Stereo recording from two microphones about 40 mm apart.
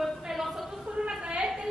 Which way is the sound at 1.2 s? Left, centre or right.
Right.